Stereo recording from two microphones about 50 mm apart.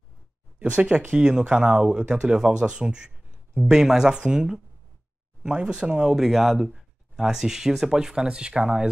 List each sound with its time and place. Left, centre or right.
0.6 s speech: right